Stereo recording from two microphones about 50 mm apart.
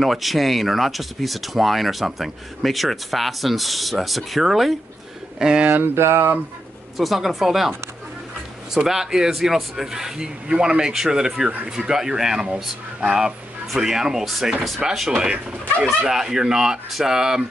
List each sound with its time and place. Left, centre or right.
0.0 s speech: centre
5.4 s speech: centre
5.9 s speech: right
7.0 s speech: centre
8.7 s speech: centre